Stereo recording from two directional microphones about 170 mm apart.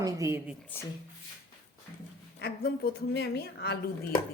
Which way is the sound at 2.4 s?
70° left (ahead or behind).